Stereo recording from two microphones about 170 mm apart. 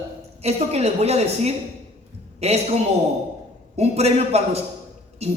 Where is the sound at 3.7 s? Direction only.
40° right (ahead or behind).